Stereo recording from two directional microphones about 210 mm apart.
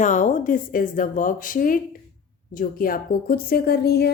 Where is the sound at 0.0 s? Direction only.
35° left (ahead or behind).